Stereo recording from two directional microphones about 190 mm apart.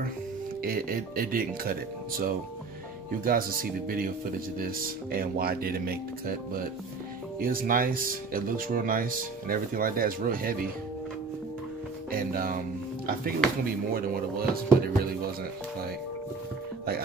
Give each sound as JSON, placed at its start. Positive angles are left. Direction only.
{"t": 0.6, "sound": "speech", "side_deg": -50}
{"t": 12.1, "sound": "speech", "side_deg": -50}